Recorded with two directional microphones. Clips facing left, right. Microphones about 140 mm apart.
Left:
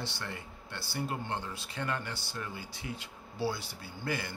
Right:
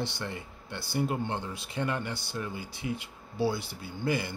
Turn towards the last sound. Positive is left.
turn(degrees=-15)  # may be behind; listen again after turning